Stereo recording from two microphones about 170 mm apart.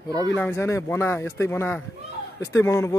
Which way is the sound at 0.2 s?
15° left (ahead or behind).